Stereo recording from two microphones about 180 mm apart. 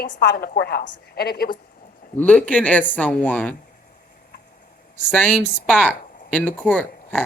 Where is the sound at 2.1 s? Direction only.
10° left (ahead or behind).